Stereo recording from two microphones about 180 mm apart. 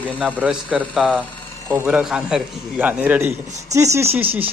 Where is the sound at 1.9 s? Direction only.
5° right (ahead or behind).